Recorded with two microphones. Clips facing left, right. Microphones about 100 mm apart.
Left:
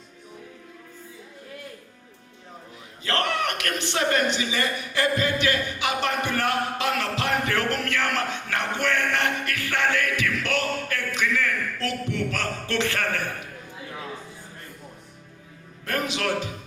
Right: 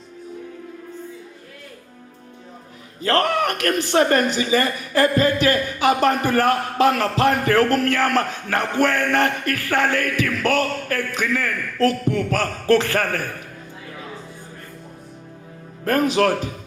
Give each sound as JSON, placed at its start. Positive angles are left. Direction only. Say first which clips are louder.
{"t": 3.0, "sound": "a man's voice", "louder": "right 6 dB", "side_deg": -40}
{"t": 15.8, "sound": "a man's voice", "louder": "right 10 dB", "side_deg": -45}